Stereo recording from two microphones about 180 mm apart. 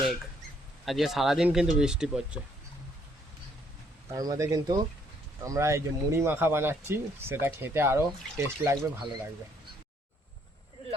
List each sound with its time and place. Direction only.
0.9 s speech: centre (ahead or behind)
4.1 s speech: 20° right (ahead or behind)